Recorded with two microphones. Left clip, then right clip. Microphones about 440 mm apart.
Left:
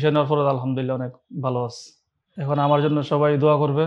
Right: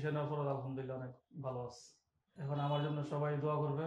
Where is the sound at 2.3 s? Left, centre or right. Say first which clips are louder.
Left 19 dB; left.